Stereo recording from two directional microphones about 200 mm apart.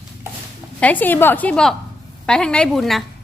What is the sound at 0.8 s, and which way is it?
A woman's voice, 10° left (ahead or behind).